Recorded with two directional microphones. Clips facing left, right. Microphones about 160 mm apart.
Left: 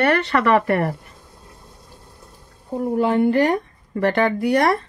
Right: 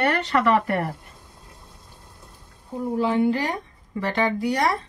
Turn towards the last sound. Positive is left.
turn(degrees=60)  # may be behind; listen again after turning